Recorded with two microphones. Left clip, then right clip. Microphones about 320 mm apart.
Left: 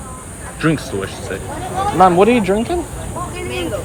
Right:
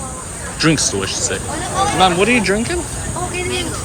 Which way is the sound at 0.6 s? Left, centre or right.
Centre.